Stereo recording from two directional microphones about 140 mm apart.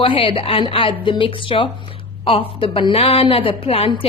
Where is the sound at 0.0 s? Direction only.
40° left (ahead or behind).